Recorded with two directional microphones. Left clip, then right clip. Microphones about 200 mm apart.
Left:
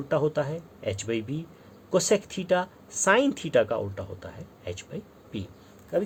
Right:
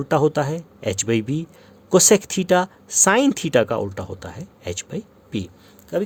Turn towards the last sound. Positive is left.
turn(degrees=-55)  # may be behind; listen again after turning